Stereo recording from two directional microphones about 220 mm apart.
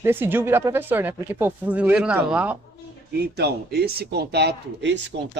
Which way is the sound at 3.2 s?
50° right (ahead or behind).